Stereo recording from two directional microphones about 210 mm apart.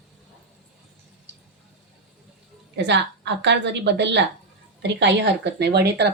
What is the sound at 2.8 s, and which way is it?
A woman's voice, 55° right (ahead or behind).